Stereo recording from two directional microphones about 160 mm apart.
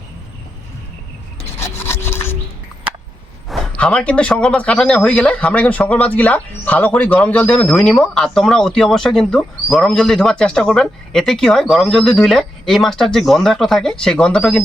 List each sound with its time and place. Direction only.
1.5 s rub: 15° left (ahead or behind)
3.5 s speech: 5° left (ahead or behind)